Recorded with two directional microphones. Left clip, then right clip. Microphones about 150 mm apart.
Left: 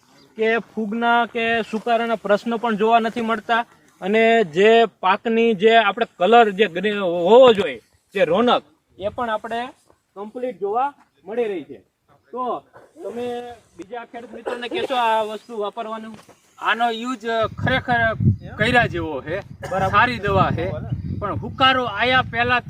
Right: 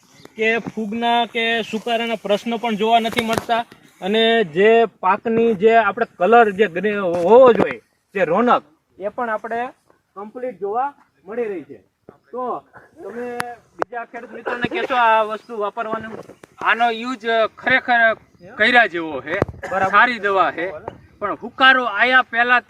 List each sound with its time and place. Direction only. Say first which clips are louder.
0.3 s speech: right 1 dB; 25° right (ahead or behind)
1.5 s speech: left 1 dB; 40° right (ahead or behind)
4.9 s speech: right 1 dB; 20° right (ahead or behind)
5.5 s speech: even; 40° right (ahead or behind)
6.1 s speech: right 1 dB; 20° right (ahead or behind)
9.0 s speech: right 1 dB; 5° right (ahead or behind)
14.4 s speech: right 3 dB; 15° left (ahead or behind)
16.6 s speech: right 3 dB; centre (ahead or behind)